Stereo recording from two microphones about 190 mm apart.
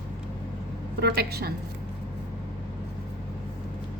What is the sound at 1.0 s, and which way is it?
Speech, 55° right (ahead or behind).